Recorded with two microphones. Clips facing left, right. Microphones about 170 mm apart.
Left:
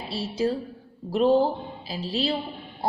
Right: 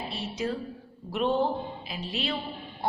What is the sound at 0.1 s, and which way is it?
A woman's voice, 30° left (ahead or behind).